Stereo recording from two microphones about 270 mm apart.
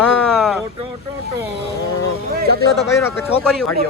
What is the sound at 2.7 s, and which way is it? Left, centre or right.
Speech, centre.